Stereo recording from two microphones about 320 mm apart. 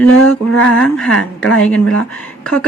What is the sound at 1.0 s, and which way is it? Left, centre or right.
Speech, centre.